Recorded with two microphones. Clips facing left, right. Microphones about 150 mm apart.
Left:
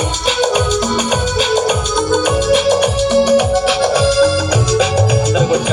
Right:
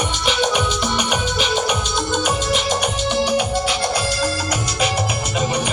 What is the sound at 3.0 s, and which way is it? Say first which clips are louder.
Organ: left 8 dB; 70° left (ahead or behind).